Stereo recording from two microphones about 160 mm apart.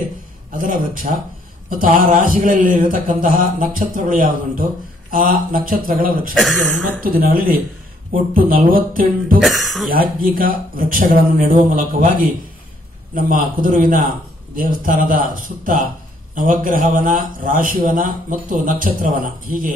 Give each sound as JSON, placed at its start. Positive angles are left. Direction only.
{"t": 0.5, "sound": "a man's voice", "side_deg": -60}
{"t": 9.4, "sound": "speech", "side_deg": 0}
{"t": 9.8, "sound": "a man's voice", "side_deg": -65}